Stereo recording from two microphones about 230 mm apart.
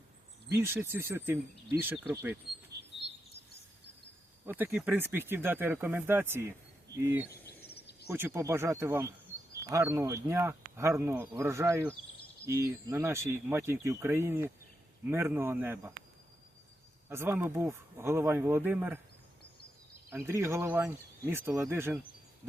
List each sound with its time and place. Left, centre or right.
0.6 s speech: centre
4.4 s speech: centre
7.4 s a sound: left
8.1 s speech: centre
17.1 s speech: centre
20.1 s speech: centre